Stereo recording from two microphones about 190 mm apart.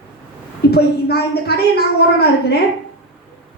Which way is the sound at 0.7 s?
55° left (ahead or behind).